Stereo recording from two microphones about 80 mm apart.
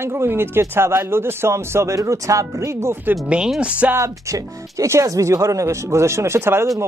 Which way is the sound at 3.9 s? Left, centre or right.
Right.